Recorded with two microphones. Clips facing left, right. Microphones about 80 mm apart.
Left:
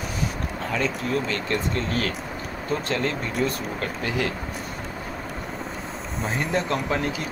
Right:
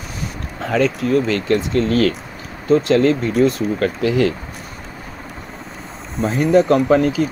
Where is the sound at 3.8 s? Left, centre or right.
Right.